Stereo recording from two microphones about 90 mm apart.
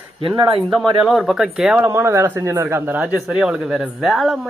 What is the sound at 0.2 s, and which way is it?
Speech, 80° right.